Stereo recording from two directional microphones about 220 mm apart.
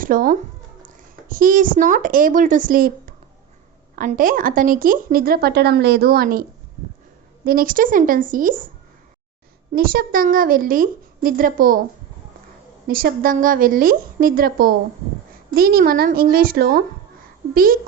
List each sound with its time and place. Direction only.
0.0 s a woman's voice: 40° right (ahead or behind)
7.4 s a woman's voice: 40° right (ahead or behind)
9.7 s a woman's voice: 45° right (ahead or behind)
12.9 s a woman's voice: 40° right (ahead or behind)